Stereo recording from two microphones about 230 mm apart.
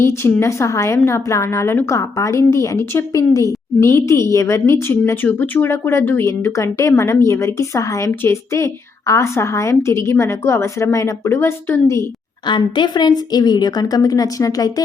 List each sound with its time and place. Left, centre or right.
0.0 s a woman's voice: centre